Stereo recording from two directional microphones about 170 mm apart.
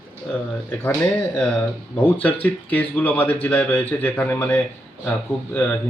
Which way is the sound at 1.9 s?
10° left (ahead or behind).